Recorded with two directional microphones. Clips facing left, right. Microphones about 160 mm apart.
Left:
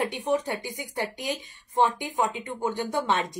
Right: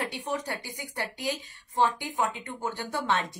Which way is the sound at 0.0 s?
20° left (ahead or behind).